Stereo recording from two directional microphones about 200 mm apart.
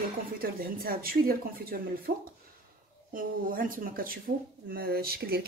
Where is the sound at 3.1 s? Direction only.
45° right (ahead or behind).